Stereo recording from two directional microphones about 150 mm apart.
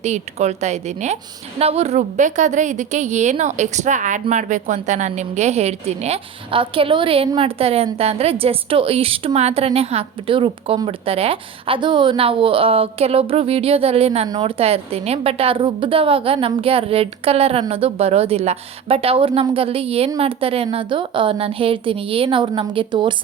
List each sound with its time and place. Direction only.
0.0 s a woman's voice: 50° right (ahead or behind)
14.3 s speech: 30° right (ahead or behind)
14.6 s a woman's voice: 40° right (ahead or behind)